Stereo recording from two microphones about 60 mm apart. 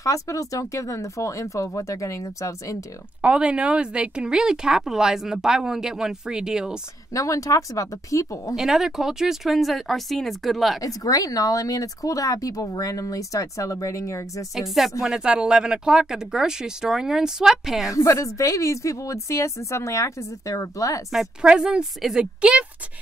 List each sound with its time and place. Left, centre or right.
0.0 s speech: left
3.2 s a woman's voice: centre
7.2 s speech: left
8.5 s speech: centre
10.8 s speech: left
14.5 s speech: centre
15.1 s a woman's voice: centre
17.9 s speech: left
21.4 s a woman's voice: centre